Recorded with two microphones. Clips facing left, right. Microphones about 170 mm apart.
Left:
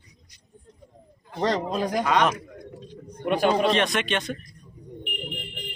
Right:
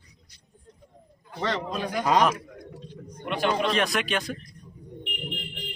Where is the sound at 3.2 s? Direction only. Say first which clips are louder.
Left 4 dB; 45° left (ahead or behind).